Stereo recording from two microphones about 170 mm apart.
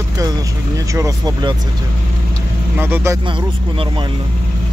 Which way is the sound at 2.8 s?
15° right (ahead or behind).